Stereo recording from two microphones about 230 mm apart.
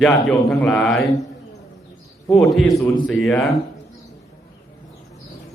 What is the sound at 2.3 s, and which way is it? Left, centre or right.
A man's voice, centre.